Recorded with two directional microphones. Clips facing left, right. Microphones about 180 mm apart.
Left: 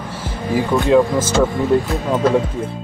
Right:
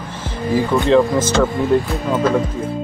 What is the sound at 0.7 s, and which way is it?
Speech, centre (ahead or behind).